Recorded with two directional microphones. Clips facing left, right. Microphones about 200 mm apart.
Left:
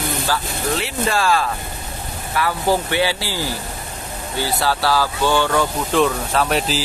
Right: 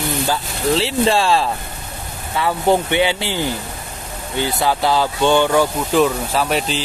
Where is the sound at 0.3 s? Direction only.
30° right (ahead or behind).